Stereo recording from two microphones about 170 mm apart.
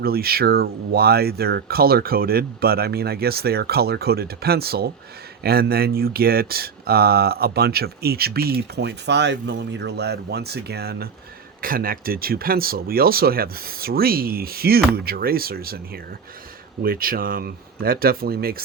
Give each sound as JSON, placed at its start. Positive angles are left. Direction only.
{"t": 0.0, "sound": "speech", "side_deg": -65}
{"t": 16.8, "sound": "speech", "side_deg": -60}